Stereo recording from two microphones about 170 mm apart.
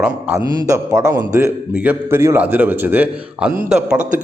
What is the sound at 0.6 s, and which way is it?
A man's voice, 20° right (ahead or behind).